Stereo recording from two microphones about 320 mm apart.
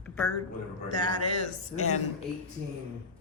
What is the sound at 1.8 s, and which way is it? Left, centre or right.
Speech, left.